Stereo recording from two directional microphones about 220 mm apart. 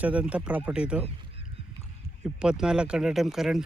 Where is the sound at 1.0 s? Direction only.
25° right (ahead or behind).